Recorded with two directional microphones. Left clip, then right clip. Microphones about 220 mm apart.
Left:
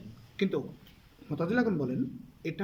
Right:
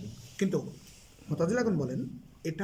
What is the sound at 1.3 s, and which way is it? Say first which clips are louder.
Speech: right 1 dB; 5° right (ahead or behind).